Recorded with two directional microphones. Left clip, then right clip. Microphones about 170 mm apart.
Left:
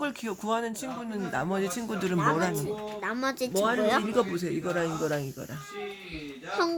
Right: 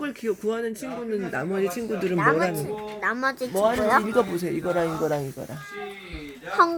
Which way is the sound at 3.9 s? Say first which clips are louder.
Right 5 dB; 40° left (ahead or behind).